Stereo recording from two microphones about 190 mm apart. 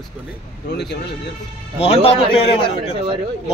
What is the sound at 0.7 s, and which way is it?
Speech, 60° left (ahead or behind).